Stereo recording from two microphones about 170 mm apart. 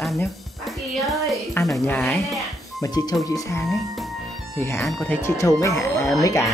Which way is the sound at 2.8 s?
20° left (ahead or behind).